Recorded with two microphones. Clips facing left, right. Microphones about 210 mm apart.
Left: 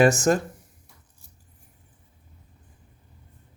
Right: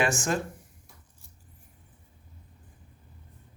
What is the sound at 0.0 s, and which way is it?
Speech, 40° left (ahead or behind).